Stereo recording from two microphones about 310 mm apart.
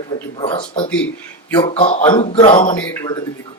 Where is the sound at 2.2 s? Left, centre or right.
Centre.